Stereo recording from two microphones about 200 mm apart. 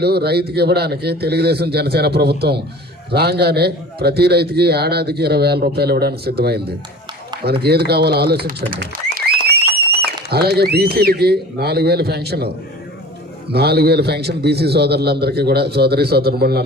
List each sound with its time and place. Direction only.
0.0 s a man's voice: 55° right (ahead or behind)
13.5 s a man's voice: 55° right (ahead or behind)